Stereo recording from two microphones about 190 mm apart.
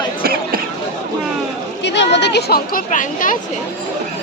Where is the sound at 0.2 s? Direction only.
50° right (ahead or behind).